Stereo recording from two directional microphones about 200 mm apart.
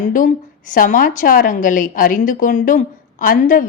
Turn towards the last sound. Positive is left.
turn(degrees=40)  # may be behind; listen again after turning